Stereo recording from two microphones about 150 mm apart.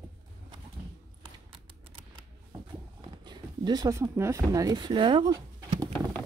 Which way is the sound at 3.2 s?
30° right (ahead or behind).